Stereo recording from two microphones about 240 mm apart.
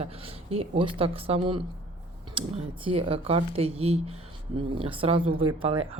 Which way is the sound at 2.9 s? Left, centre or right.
Right.